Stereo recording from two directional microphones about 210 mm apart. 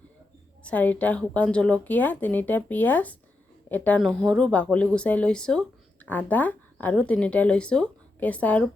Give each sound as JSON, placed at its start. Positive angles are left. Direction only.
{"t": 0.6, "sound": "a woman's voice", "side_deg": 5}